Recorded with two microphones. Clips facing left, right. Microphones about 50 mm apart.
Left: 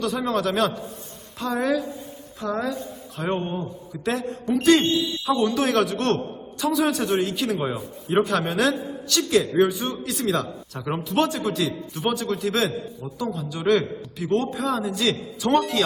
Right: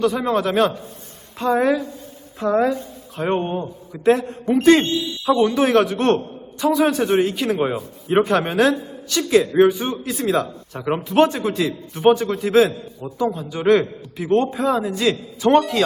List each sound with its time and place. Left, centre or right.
0.0 s speech: centre